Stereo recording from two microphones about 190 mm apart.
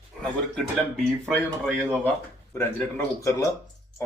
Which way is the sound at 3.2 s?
15° left (ahead or behind).